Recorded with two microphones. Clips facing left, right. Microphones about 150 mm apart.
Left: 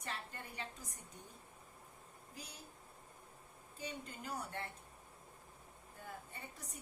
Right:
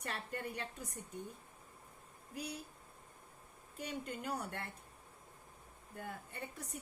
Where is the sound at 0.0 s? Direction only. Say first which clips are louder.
Right 5 dB; 60° right (ahead or behind).